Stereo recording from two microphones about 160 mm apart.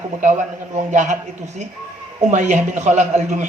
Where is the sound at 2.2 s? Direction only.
45° right (ahead or behind).